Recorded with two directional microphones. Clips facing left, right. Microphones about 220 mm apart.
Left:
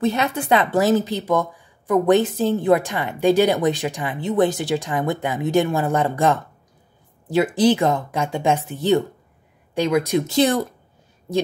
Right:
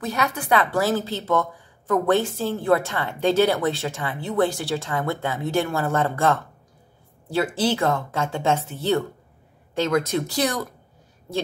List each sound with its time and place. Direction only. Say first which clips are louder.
0.0 s a woman's voice: left 5 dB; 25° left (ahead or behind)